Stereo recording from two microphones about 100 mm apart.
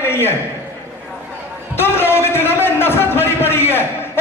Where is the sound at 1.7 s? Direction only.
25° left (ahead or behind).